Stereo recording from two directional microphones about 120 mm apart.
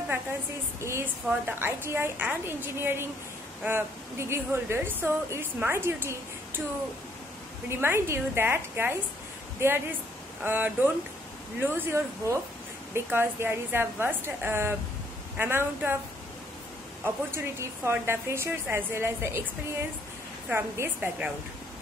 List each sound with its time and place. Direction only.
0.7 s a woman's voice: 20° right (ahead or behind)
7.8 s a woman's voice: 20° right (ahead or behind)
17.0 s a woman's voice: 20° right (ahead or behind)
20.4 s a woman's voice: 20° right (ahead or behind)